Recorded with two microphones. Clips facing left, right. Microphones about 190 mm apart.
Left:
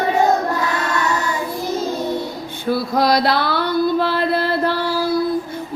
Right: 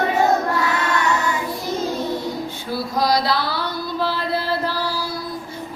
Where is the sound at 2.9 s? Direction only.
60° left (ahead or behind).